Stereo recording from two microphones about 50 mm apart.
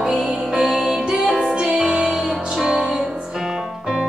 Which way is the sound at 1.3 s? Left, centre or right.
Centre.